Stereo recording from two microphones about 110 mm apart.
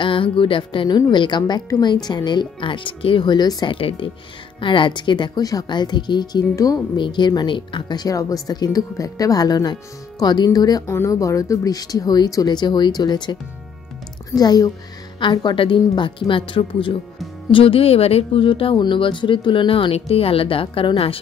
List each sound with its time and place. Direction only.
0.0 s speech: 50° left (ahead or behind)
3.7 s speech: 55° left (ahead or behind)
6.5 s speech: 30° left (ahead or behind)
7.0 s speech: 45° left (ahead or behind)